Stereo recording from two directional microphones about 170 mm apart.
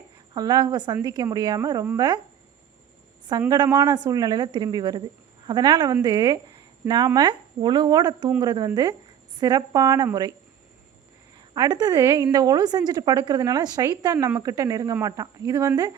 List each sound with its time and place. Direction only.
0.3 s a woman's voice: 25° right (ahead or behind)
3.5 s a woman's voice: 20° right (ahead or behind)
11.3 s a woman's voice: 25° right (ahead or behind)